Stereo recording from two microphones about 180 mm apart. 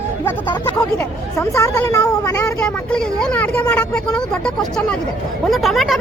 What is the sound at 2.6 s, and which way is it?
Speech, 5° left (ahead or behind).